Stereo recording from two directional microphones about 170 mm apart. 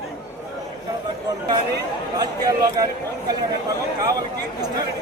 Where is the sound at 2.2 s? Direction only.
25° right (ahead or behind).